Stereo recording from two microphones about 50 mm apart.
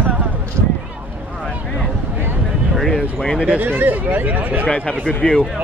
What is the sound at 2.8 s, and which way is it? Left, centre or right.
Speech, centre.